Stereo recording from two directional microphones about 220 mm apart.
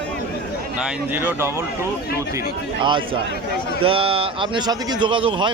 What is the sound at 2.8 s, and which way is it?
A man's voice, 20° right (ahead or behind).